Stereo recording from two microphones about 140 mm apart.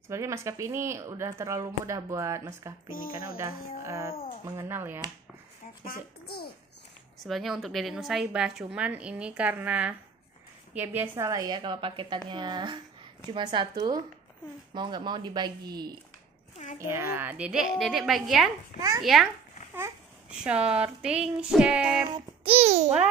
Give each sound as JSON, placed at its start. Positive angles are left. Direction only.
{"t": 0.1, "sound": "a woman's voice", "side_deg": -20}
{"t": 5.9, "sound": "a child's voice", "side_deg": 90}
{"t": 7.2, "sound": "a woman's voice", "side_deg": 0}
{"t": 16.7, "sound": "a woman's voice", "side_deg": -20}
{"t": 22.1, "sound": "a child's voice", "side_deg": -40}